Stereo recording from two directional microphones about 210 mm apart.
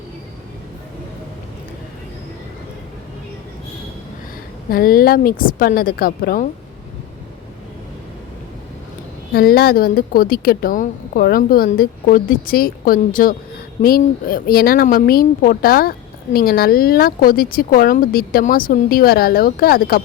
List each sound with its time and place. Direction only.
4.7 s speech: 45° left (ahead or behind)
9.3 s speech: 45° left (ahead or behind)